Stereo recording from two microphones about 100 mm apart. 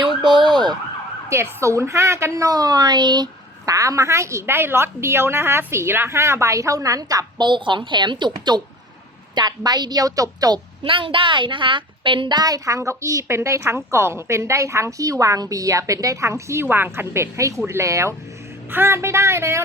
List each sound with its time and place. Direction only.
0.3 s ambulance: 50° right (ahead or behind)
1.3 s a woman's voice: 30° right (ahead or behind); by 3.2 s 45° right (ahead or behind)
3.7 s a woman's voice: 35° right (ahead or behind)
10.8 s a woman's voice: 60° right (ahead or behind); by 19.6 s 25° right (ahead or behind)